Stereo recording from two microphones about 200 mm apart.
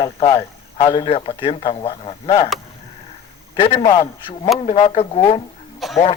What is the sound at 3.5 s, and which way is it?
A man's voice, 30° left (ahead or behind).